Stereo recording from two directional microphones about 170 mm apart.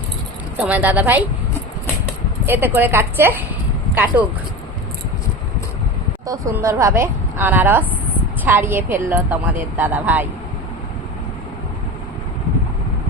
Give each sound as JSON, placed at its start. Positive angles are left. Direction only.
{"t": 0.5, "sound": "a woman's voice", "side_deg": -10}
{"t": 2.5, "sound": "a woman's voice", "side_deg": -10}
{"t": 6.2, "sound": "a woman's voice", "side_deg": -20}